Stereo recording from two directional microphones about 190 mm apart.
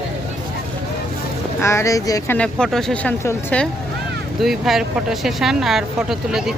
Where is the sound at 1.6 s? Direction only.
15° left (ahead or behind).